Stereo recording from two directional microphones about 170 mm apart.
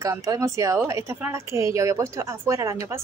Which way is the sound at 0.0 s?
20° right (ahead or behind).